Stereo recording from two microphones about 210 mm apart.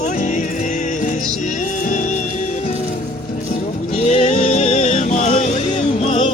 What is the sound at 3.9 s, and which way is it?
Music, 30° left (ahead or behind).